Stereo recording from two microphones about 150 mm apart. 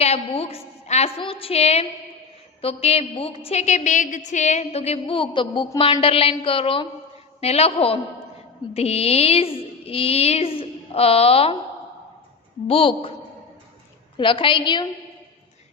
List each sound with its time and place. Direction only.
0.0 s a woman's voice: 40° left (ahead or behind)
12.6 s a woman's voice: 35° left (ahead or behind)
14.2 s a woman's voice: 35° left (ahead or behind)